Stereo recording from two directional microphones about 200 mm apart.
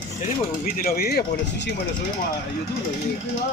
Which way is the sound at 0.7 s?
45° left (ahead or behind).